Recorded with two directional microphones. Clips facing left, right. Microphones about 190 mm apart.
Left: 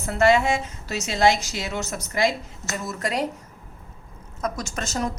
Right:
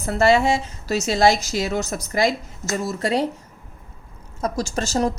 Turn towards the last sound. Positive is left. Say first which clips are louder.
# right 6 dB
turn(degrees=-30)  # may be behind; listen again after turning